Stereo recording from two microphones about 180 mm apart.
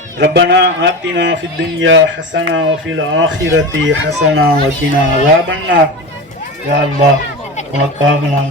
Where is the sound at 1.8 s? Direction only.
90° right; by 4.5 s 65° right (ahead or behind).